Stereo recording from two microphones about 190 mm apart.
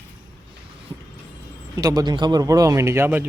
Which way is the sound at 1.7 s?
20° right (ahead or behind).